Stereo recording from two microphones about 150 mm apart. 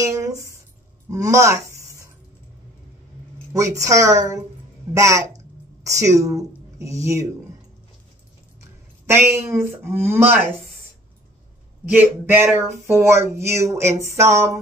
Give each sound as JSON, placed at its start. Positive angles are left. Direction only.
{"t": 0.0, "sound": "a sound", "side_deg": -20}
{"t": 1.1, "sound": "speech", "side_deg": -20}
{"t": 3.5, "sound": "a woman's voice", "side_deg": -20}
{"t": 9.0, "sound": "speech", "side_deg": -15}
{"t": 11.9, "sound": "speech", "side_deg": -15}